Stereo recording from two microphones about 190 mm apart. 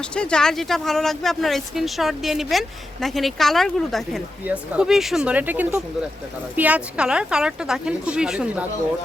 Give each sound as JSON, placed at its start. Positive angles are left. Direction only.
{"t": 0.0, "sound": "speech", "side_deg": 5}